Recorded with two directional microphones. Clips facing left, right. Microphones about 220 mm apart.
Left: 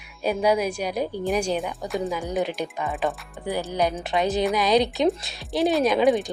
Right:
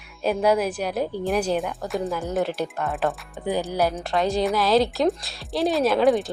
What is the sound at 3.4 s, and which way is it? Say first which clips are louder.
Speech: right 2 dB; 15° right (ahead or behind).